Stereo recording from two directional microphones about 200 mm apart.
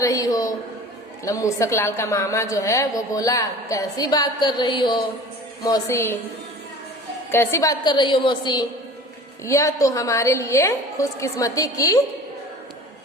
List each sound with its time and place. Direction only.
0.0 s a woman's voice: 15° left (ahead or behind)
7.3 s a woman's voice: 10° left (ahead or behind)